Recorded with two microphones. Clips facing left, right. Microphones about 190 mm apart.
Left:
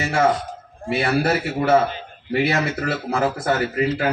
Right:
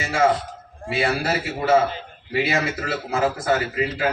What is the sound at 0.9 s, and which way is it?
A man's voice, 60° left (ahead or behind).